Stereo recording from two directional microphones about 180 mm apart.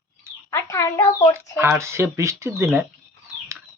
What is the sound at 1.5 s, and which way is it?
Speech, 15° right (ahead or behind).